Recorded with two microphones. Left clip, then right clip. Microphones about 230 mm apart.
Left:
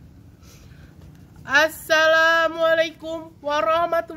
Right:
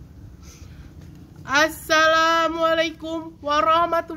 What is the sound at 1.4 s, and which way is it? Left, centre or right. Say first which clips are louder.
Speech: left 1 dB; centre.